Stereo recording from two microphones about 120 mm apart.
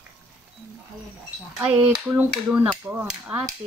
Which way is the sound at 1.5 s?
10° right (ahead or behind).